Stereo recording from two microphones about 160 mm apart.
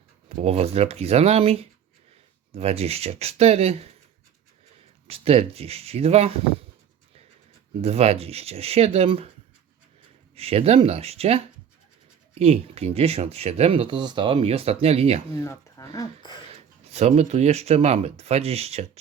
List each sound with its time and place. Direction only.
0.3 s speech: 40° right (ahead or behind)
5.0 s speech: 40° right (ahead or behind)
7.8 s speech: 40° right (ahead or behind)
10.3 s speech: 40° right (ahead or behind)
15.4 s speech: 20° left (ahead or behind)
16.9 s speech: 40° right (ahead or behind)